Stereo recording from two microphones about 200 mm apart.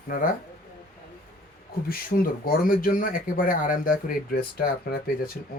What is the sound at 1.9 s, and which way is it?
Speech, 45° left (ahead or behind).